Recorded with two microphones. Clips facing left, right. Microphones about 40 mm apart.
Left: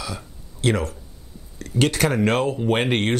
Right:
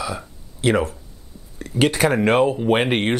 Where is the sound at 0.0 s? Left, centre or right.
Centre.